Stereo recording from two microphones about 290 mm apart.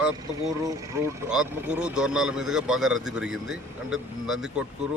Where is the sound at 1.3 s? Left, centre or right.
Centre.